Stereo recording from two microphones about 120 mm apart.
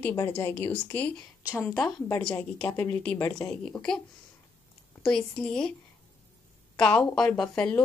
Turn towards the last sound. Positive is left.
turn(degrees=10)  # may be behind; listen again after turning